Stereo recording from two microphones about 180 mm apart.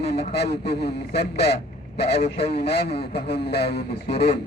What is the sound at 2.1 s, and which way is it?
Speech, 35° left (ahead or behind).